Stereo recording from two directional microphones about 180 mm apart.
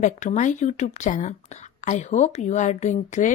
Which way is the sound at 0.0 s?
45° left (ahead or behind).